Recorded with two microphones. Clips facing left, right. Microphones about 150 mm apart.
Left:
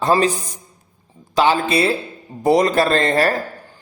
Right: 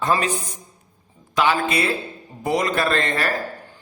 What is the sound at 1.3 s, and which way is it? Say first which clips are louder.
Speech: left 4 dB; 30° left (ahead or behind).